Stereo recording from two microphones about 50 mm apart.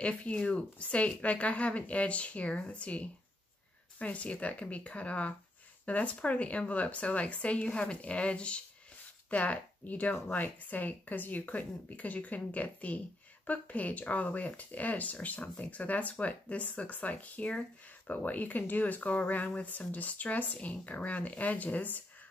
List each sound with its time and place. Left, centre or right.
0.0 s speech: left